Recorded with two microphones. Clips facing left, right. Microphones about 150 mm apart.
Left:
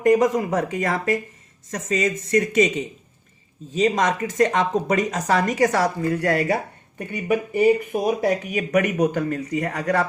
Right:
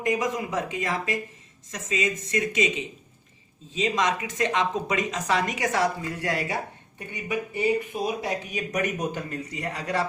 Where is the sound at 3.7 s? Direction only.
50° left (ahead or behind).